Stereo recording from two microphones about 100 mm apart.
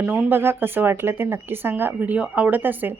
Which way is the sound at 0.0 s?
15° right (ahead or behind).